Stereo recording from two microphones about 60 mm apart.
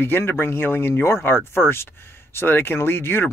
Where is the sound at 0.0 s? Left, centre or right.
Left.